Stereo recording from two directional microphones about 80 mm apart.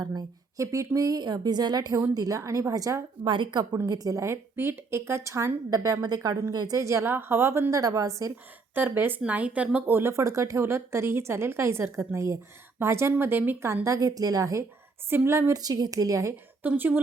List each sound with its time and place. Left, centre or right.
0.0 s speech: right
0.6 s speech: right
2.1 s speech: right
3.2 s speech: right
3.8 s speech: right
6.5 s a woman's voice: right
6.7 s speech: right
7.0 s speech: right
8.7 s speech: right
13.8 s speech: right
15.6 s speech: right
16.6 s speech: right